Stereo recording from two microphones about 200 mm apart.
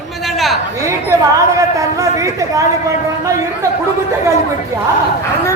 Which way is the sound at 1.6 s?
15° right (ahead or behind).